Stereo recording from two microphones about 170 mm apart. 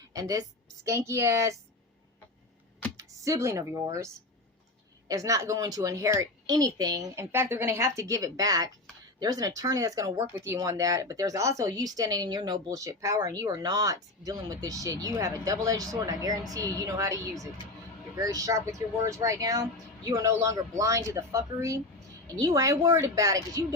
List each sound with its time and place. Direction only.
0.2 s speech: 20° right (ahead or behind)
3.0 s speech: 15° right (ahead or behind)